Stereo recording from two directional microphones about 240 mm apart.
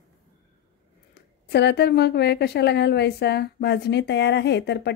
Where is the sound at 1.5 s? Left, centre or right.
Left.